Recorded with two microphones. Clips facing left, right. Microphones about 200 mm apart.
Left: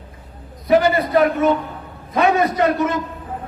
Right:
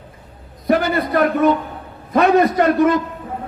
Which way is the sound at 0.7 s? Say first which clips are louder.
Left 2 dB; 55° right (ahead or behind).